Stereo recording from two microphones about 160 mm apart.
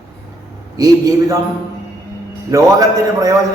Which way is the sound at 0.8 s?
20° right (ahead or behind).